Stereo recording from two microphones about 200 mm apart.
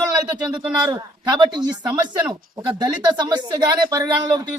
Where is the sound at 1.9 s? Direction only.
5° right (ahead or behind).